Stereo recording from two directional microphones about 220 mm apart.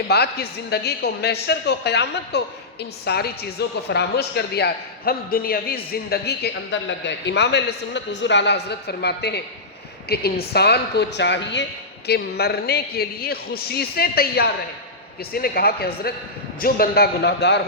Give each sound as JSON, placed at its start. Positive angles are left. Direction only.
{"t": 0.1, "sound": "a man's voice", "side_deg": 45}